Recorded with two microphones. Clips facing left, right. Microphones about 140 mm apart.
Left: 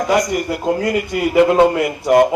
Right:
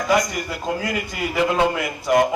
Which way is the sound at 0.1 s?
40° left (ahead or behind).